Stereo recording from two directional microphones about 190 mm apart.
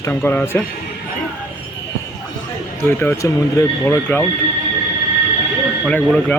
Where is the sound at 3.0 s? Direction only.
15° left (ahead or behind).